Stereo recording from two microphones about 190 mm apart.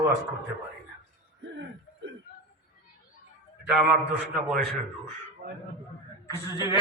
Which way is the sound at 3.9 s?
5° right (ahead or behind).